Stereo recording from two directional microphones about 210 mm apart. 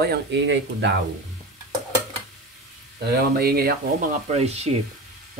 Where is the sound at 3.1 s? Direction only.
45° right (ahead or behind).